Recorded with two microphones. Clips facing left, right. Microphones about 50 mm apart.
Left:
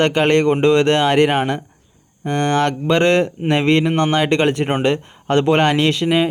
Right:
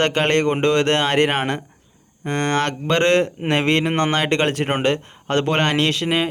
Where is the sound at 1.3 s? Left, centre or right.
Right.